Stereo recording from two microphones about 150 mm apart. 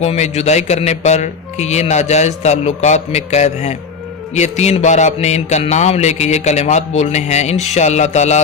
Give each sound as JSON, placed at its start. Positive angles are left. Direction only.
{"t": 0.0, "sound": "speech", "side_deg": 45}